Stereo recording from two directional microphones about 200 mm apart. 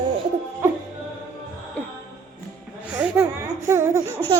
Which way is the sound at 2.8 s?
5° right (ahead or behind).